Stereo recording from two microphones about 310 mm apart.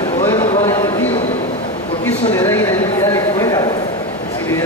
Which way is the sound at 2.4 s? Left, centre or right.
Centre.